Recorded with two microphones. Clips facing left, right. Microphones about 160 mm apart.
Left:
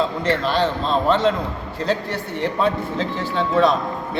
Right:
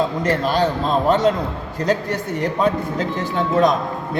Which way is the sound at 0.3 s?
40° right (ahead or behind).